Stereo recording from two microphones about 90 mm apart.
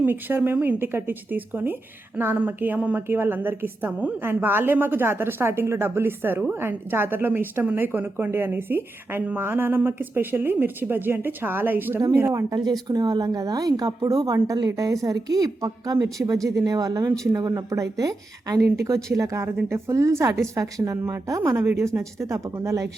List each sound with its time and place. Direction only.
0.0 s a woman's voice: 20° right (ahead or behind)
12.3 s speech: 35° right (ahead or behind)
12.5 s a woman's voice: 50° right (ahead or behind)